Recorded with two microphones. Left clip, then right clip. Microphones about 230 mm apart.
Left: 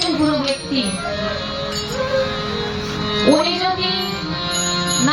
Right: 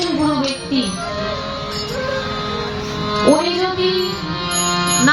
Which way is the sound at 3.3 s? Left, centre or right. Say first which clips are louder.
Right 1 dB; centre.